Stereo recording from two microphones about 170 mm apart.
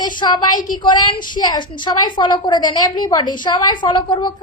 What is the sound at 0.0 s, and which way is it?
A woman's voice, 25° left (ahead or behind).